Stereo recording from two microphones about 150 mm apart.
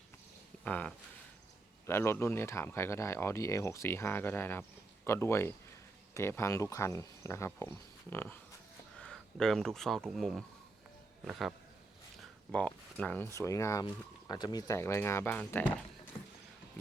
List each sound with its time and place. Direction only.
0.6 s speech: 10° left (ahead or behind)
9.0 s speech: 5° left (ahead or behind)